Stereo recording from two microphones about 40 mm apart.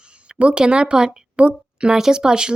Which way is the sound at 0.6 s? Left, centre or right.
Right.